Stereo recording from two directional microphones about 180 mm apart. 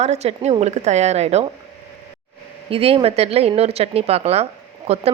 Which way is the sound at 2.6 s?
30° right (ahead or behind).